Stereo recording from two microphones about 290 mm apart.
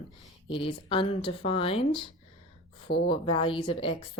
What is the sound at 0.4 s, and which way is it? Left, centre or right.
A woman's voice, centre.